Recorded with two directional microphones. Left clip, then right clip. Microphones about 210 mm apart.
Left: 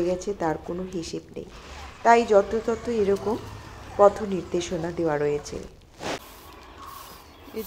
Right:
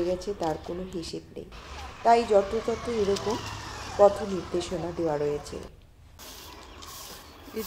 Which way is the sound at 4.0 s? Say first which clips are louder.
Left 2 dB; 15° left (ahead or behind).